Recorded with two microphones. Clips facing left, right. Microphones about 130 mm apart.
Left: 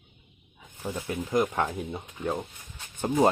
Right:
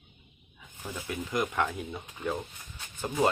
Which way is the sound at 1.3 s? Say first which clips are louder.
Left 4 dB; 30° left (ahead or behind).